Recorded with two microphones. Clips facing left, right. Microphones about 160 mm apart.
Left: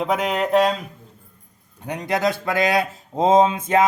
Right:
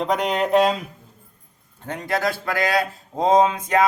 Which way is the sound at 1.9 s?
20° left (ahead or behind).